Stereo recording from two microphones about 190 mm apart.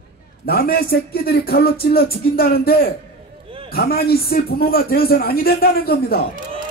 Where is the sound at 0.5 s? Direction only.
55° left (ahead or behind).